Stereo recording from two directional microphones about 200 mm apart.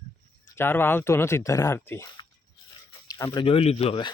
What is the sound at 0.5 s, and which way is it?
Speech, 10° left (ahead or behind).